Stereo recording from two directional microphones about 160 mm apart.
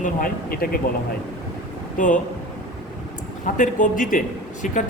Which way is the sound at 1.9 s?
55° left (ahead or behind).